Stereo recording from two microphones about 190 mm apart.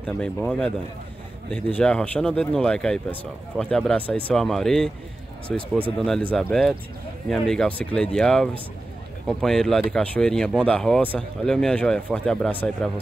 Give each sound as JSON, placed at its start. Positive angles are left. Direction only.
{"t": 0.0, "sound": "speech", "side_deg": 5}